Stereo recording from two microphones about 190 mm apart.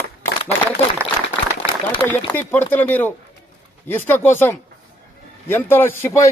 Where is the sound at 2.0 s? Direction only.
10° left (ahead or behind).